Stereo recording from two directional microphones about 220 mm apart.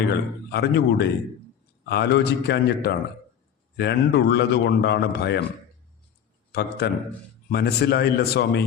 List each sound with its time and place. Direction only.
0.1 s a man's voice: 50° left (ahead or behind)
6.5 s a man's voice: 45° left (ahead or behind)